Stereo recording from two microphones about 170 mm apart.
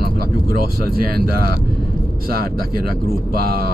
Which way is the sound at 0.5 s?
60° right (ahead or behind).